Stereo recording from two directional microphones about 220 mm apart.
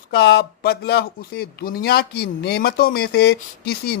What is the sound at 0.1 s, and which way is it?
A man's voice, 50° left (ahead or behind).